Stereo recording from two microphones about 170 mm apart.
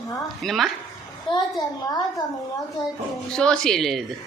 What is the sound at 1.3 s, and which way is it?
Speech, 30° left (ahead or behind).